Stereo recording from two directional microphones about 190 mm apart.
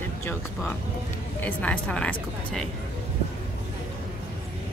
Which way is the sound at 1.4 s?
5° left (ahead or behind).